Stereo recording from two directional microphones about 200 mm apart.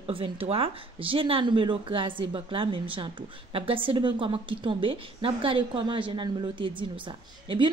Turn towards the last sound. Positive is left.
turn(degrees=-25)  # may be behind; listen again after turning